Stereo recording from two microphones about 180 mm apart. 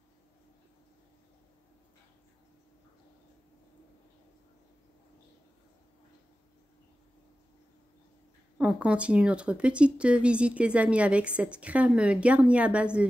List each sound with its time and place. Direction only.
8.5 s speech: 5° right (ahead or behind)